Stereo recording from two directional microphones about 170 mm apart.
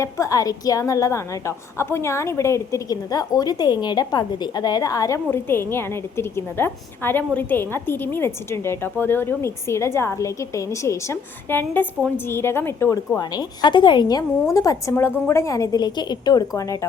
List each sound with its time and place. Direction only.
0.0 s a woman's voice: 20° left (ahead or behind)